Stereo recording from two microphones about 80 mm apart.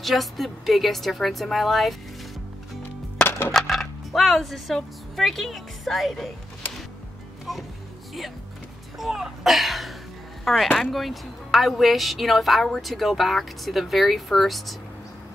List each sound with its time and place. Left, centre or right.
0.0 s speech: centre
3.3 s music: left
3.5 s speech: centre
7.5 s music: centre
8.9 s speech: centre